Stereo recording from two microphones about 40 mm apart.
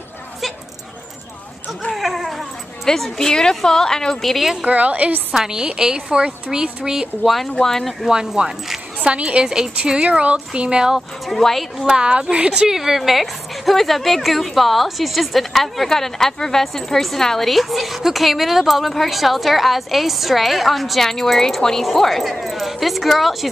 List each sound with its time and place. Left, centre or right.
1.9 s cat: centre
2.9 s a woman's voice: centre
4.2 s a woman's voice: centre
4.6 s a woman's voice: right
5.3 s a woman's voice: centre
7.2 s a woman's voice: centre
8.1 s a woman's voice: centre
9.0 s a woman's voice: right
10.0 s a woman's voice: right
10.3 s a woman's voice: right
11.2 s a woman's voice: centre
11.9 s a woman's voice: right
12.5 s a woman's voice: centre